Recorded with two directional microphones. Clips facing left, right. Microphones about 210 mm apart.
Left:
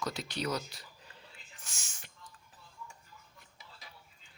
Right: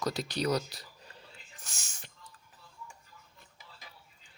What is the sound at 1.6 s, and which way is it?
Whispering, 40° right (ahead or behind).